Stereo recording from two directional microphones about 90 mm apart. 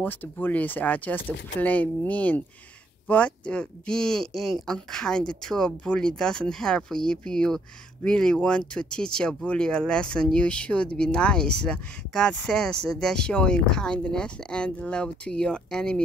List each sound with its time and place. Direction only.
0.0 s speech: 20° left (ahead or behind)